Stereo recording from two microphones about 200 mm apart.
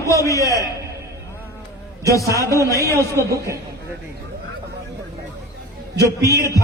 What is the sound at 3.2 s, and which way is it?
Speech, 15° right (ahead or behind).